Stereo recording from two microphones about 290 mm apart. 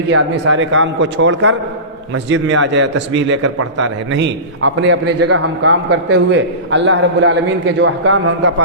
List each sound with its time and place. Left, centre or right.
0.1 s a man's voice: right